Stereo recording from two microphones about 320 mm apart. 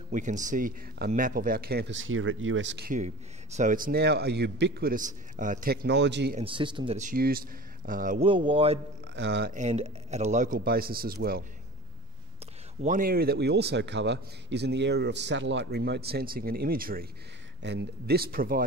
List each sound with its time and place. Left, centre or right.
0.1 s speech: right
6.4 s a man's voice: centre
9.1 s speech: right
12.8 s a man's voice: right